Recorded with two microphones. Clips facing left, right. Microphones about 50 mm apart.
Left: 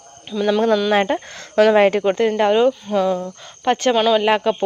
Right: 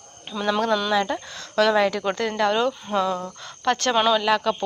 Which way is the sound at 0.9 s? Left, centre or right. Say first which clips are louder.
Left 5 dB; left.